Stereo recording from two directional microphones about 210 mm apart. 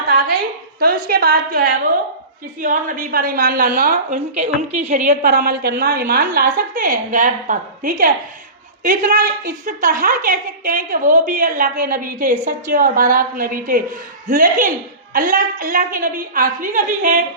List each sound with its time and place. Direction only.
0.8 s a woman's voice: 45° right (ahead or behind); by 4.9 s 30° right (ahead or behind)
5.0 s a woman's voice: 45° right (ahead or behind)